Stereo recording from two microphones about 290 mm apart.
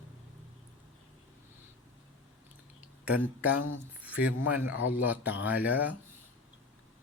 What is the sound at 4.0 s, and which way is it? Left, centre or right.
Speech, centre.